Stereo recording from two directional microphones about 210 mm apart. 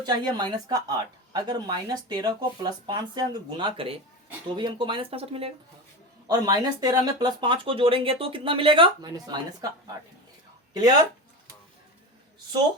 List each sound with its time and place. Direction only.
0.0 s speech: 20° right (ahead or behind)